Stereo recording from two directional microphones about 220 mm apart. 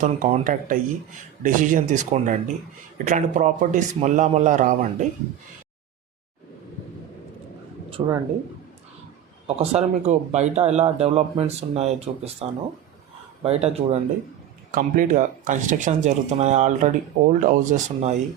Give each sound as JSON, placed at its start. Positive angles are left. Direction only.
{"t": 0.0, "sound": "speech", "side_deg": -30}
{"t": 7.9, "sound": "speech", "side_deg": -25}
{"t": 9.6, "sound": "speech", "side_deg": -30}
{"t": 14.7, "sound": "speech", "side_deg": -40}